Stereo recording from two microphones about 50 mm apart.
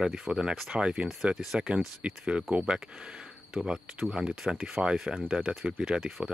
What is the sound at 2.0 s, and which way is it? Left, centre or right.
Speech, right.